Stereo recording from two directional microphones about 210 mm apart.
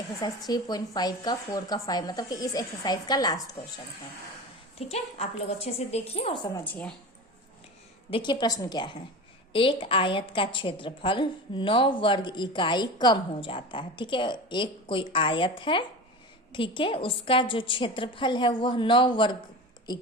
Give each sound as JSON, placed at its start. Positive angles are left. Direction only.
{"t": 0.2, "sound": "a woman's voice", "side_deg": 20}
{"t": 4.9, "sound": "a woman's voice", "side_deg": 30}
{"t": 6.7, "sound": "speech", "side_deg": 5}
{"t": 8.1, "sound": "a woman's voice", "side_deg": 20}